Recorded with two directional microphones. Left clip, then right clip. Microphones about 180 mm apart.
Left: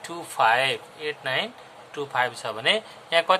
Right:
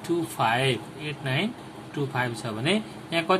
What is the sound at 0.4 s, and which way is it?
A man's voice, 40° left (ahead or behind).